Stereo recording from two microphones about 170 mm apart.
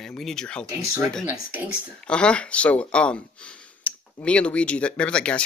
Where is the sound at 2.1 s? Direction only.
5° left (ahead or behind).